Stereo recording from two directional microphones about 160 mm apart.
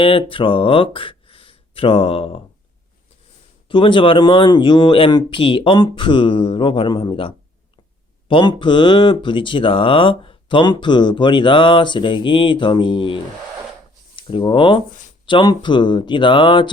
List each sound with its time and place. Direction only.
0.0 s speech: 35° left (ahead or behind)
3.7 s speech: 30° left (ahead or behind)
14.2 s speech: 30° left (ahead or behind)